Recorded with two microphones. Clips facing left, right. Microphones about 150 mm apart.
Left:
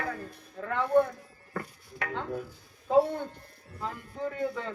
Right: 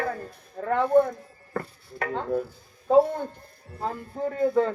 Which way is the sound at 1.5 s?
40° right (ahead or behind).